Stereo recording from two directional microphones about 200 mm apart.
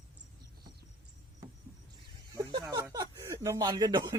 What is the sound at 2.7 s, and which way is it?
Chuckle, 20° right (ahead or behind).